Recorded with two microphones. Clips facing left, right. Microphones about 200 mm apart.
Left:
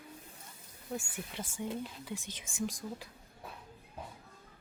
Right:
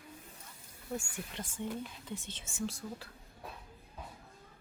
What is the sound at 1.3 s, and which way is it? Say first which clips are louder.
Speech: left 1 dB; 10° left (ahead or behind).